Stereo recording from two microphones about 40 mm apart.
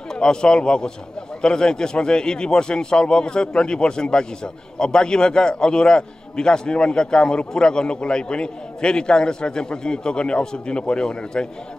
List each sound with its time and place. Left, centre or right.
0.1 s a man's voice: centre